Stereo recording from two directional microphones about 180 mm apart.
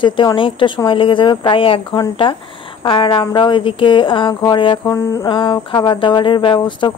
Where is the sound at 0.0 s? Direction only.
25° left (ahead or behind).